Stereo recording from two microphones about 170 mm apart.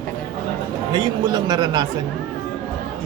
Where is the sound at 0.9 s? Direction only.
25° right (ahead or behind).